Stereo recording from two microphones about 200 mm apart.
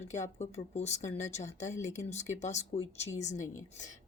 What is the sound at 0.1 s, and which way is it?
Speech, 35° left (ahead or behind).